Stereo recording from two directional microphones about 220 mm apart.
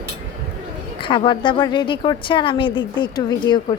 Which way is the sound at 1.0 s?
20° left (ahead or behind).